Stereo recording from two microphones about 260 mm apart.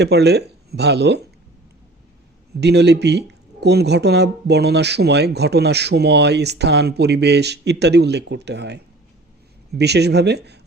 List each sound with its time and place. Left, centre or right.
0.0 s speech: right
2.6 s speech: right